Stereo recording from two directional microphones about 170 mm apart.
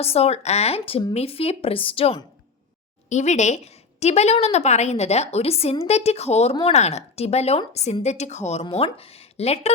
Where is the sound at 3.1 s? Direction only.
45° left (ahead or behind).